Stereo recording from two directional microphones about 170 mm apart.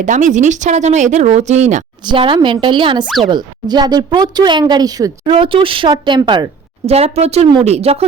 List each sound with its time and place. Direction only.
0.0 s speech: 45° right (ahead or behind)
2.0 s speech: 30° right (ahead or behind)